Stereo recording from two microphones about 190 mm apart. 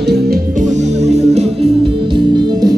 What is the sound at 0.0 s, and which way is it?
Music, 60° right (ahead or behind).